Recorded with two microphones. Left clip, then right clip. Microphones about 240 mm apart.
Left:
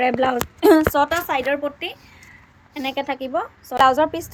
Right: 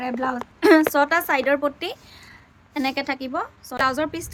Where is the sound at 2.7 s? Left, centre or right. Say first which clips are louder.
Even; centre.